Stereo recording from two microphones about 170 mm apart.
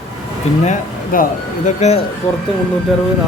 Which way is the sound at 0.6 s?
50° left (ahead or behind).